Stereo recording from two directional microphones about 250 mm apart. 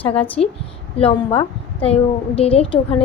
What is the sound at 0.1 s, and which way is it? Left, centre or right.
A woman's voice, left.